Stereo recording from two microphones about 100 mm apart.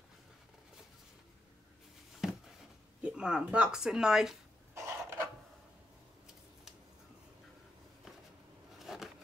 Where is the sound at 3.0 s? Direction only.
10° right (ahead or behind).